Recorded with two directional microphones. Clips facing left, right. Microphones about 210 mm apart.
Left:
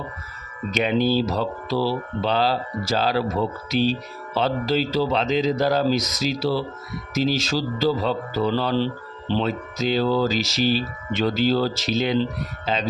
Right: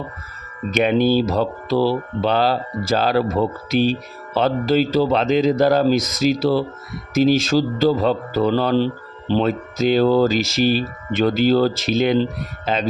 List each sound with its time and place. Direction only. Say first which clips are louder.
0.7 s a man's voice: right 4 dB; 55° right (ahead or behind)